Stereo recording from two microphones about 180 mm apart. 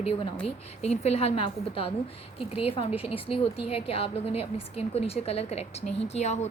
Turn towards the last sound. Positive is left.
turn(degrees=40)  # may be behind; listen again after turning